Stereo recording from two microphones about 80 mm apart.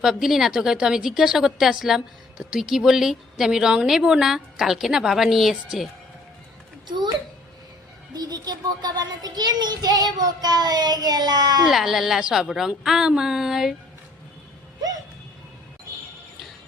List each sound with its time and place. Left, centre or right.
0.0 s a woman's voice: centre
6.8 s a child's voice: right
8.1 s a child's voice: right
11.7 s a woman's voice: centre